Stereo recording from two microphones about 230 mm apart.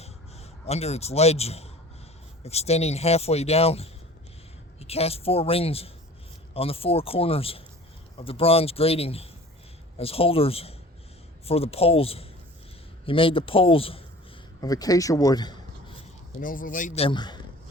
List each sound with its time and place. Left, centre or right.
0.0 s a sound: left
2.4 s a man's voice: left
16.4 s a man's voice: left; by 17.4 s centre